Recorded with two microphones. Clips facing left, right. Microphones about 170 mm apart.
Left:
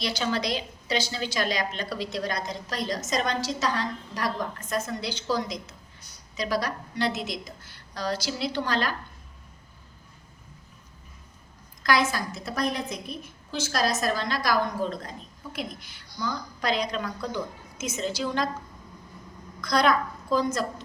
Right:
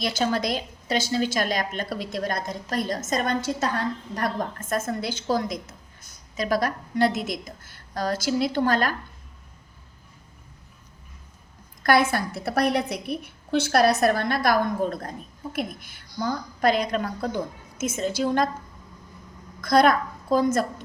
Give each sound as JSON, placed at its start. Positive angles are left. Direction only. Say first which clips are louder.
{"t": 0.0, "sound": "a woman's voice", "louder": "right 3 dB", "side_deg": -45}
{"t": 11.8, "sound": "a woman's voice", "louder": "right 4 dB", "side_deg": -55}
{"t": 19.6, "sound": "a woman's voice", "louder": "right 4 dB", "side_deg": -50}